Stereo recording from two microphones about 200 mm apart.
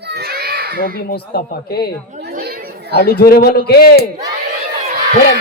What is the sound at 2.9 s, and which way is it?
Speech, 50° left (ahead or behind).